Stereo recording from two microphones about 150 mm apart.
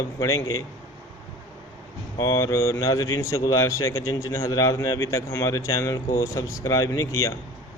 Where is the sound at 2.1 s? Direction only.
25° left (ahead or behind).